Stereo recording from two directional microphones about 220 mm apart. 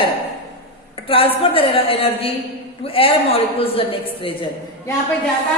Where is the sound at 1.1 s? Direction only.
25° left (ahead or behind).